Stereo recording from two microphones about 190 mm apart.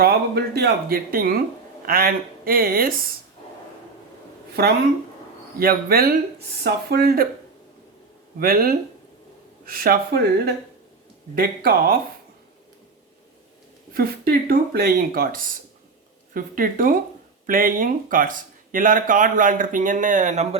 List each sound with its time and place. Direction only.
0.0 s speech: 55° right (ahead or behind)
5.5 s speech: 50° right (ahead or behind)
8.4 s speech: 50° right (ahead or behind)
13.9 s speech: 50° right (ahead or behind); by 20.6 s 35° right (ahead or behind)